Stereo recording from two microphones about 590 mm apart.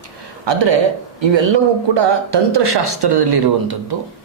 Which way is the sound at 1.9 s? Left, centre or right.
Right.